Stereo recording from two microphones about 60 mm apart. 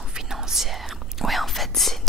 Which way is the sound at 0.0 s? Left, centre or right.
Centre.